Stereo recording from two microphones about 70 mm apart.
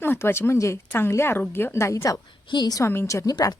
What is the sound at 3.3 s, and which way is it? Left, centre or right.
Speech, left.